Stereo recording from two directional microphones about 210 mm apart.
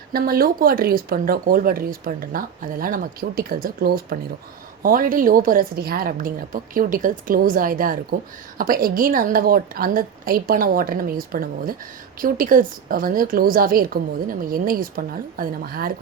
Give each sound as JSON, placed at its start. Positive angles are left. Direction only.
{"t": 0.1, "sound": "a woman's voice", "side_deg": -45}